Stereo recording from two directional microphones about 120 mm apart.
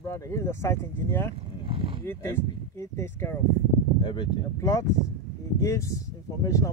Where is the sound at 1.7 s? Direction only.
45° right (ahead or behind).